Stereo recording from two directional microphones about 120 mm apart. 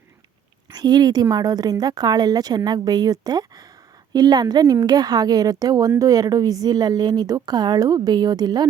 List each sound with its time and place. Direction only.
0.7 s a woman's voice: 35° right (ahead or behind)